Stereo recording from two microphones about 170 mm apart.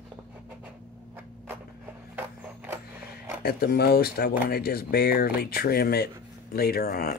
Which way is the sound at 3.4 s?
65° left (ahead or behind).